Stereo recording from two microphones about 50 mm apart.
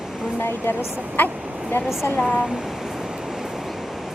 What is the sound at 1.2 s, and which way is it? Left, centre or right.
Speech, left.